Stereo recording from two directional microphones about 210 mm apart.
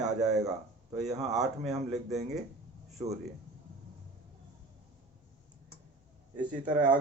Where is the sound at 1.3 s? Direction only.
Centre (ahead or behind).